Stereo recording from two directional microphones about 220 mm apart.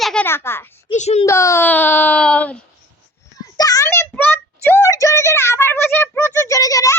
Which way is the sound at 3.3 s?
15° left (ahead or behind).